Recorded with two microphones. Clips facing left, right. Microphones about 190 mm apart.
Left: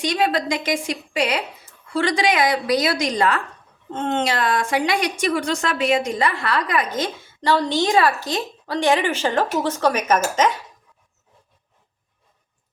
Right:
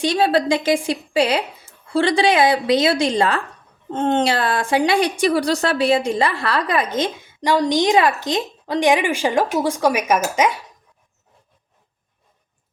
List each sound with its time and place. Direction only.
0.0 s a woman's voice: 30° right (ahead or behind); by 10.6 s 10° right (ahead or behind)